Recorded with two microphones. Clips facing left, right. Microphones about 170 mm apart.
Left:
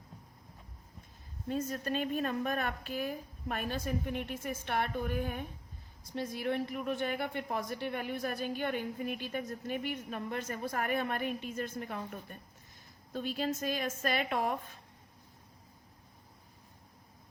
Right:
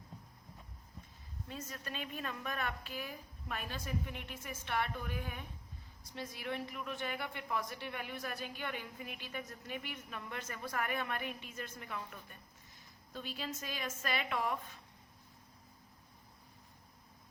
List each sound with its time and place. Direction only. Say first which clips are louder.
1.5 s a woman's voice: left 12 dB; 45° left (ahead or behind)